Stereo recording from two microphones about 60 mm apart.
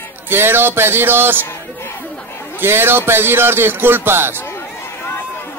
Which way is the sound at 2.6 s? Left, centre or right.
Right.